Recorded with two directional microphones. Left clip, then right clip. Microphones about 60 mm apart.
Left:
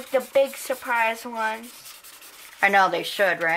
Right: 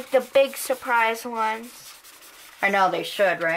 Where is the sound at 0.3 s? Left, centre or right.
Right.